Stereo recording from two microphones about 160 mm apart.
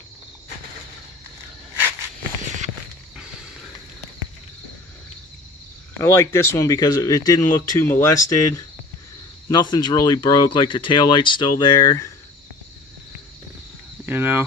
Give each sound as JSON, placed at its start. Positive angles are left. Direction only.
{"t": 3.2, "sound": "music", "side_deg": -5}
{"t": 5.9, "sound": "speech", "side_deg": 15}
{"t": 14.0, "sound": "speech", "side_deg": -10}